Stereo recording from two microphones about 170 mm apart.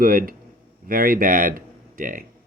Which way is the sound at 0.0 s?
55° right (ahead or behind).